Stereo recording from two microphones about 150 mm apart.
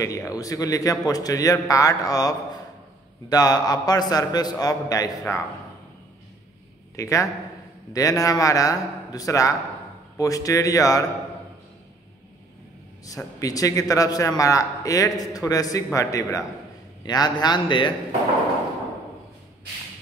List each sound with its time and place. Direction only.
0.0 s a man's voice: 20° left (ahead or behind)
7.0 s a man's voice: 20° left (ahead or behind)
13.4 s a man's voice: 25° left (ahead or behind)